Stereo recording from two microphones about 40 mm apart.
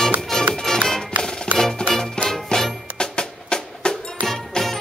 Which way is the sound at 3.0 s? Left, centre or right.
Left.